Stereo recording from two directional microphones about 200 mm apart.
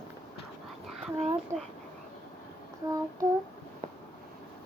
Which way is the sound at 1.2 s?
35° right (ahead or behind).